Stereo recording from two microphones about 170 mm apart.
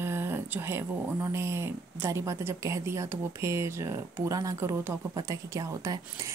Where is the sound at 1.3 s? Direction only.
15° right (ahead or behind).